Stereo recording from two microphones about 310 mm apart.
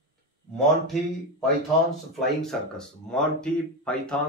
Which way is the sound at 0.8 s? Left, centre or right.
Centre.